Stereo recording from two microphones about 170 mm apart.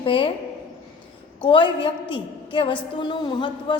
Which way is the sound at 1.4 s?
30° left (ahead or behind).